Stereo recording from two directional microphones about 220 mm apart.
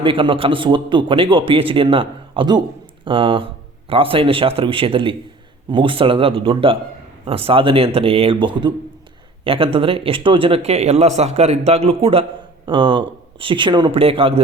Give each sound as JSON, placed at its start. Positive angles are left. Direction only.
{"t": 0.0, "sound": "a man's voice", "side_deg": -25}